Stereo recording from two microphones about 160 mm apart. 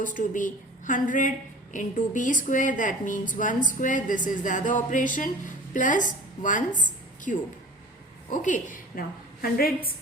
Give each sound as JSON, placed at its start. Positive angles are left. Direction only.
{"t": 0.2, "sound": "a woman's voice", "side_deg": 55}